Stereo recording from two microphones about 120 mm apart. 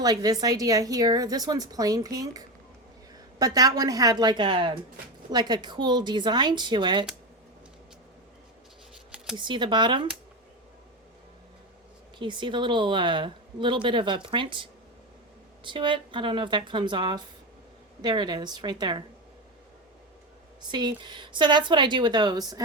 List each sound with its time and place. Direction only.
0.0 s a woman's voice: 30° right (ahead or behind)
9.4 s a woman's voice: 40° right (ahead or behind)
12.2 s a woman's voice: 40° right (ahead or behind)
20.6 s a woman's voice: 35° right (ahead or behind)